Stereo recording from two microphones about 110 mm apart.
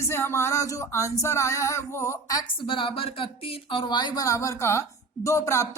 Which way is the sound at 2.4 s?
50° left (ahead or behind).